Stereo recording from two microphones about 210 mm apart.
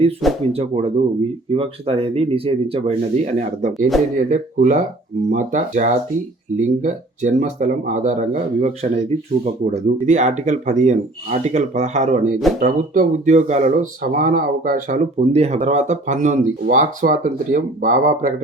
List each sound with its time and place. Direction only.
0.5 s speech: 30° right (ahead or behind)